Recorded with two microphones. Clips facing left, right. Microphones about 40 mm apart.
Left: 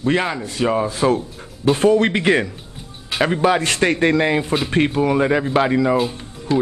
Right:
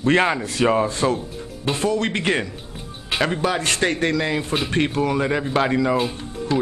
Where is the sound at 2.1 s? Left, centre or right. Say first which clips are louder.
Left 5 dB; centre.